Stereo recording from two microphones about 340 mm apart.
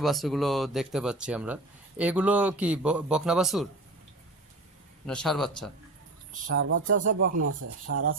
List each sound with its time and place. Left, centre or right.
0.0 s a man's voice: centre
5.0 s a man's voice: centre
6.5 s speech: right
7.0 s speech: right
7.3 s speech: right